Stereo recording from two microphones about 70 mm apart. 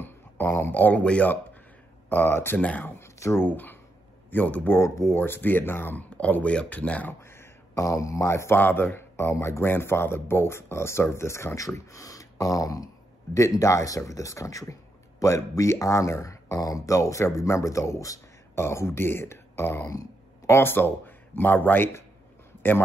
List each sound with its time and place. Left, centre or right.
0.0 s speech: left
2.0 s speech: left
2.6 s speech: left
3.0 s speech: left
3.4 s speech: left
4.7 s speech: left
5.2 s speech: left
7.2 s a sound: left
7.8 s speech: left
8.5 s speech: left
18.5 s speech: left
20.5 s speech: left